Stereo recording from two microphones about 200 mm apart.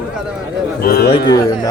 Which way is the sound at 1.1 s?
20° left (ahead or behind).